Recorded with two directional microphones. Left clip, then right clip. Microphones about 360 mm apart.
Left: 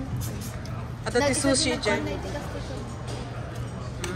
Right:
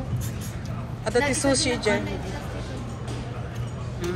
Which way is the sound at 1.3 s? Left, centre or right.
Centre.